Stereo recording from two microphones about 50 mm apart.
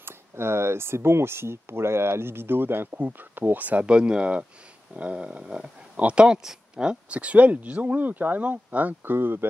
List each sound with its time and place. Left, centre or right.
0.0 s speech: right
3.8 s speech: right
9.0 s speech: right